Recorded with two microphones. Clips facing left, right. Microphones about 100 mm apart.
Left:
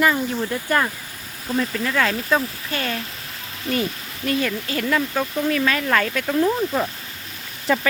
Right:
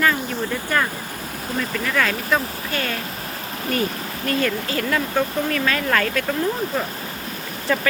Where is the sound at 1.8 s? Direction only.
25° left (ahead or behind).